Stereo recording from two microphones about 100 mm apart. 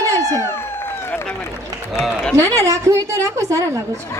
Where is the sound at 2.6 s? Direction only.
30° right (ahead or behind).